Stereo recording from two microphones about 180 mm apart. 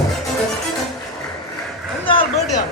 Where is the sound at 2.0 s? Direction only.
30° left (ahead or behind).